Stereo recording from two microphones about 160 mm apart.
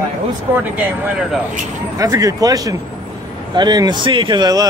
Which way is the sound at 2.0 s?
20° right (ahead or behind).